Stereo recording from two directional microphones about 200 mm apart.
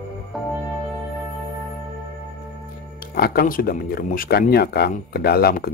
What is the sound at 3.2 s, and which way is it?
Speech, 45° left (ahead or behind).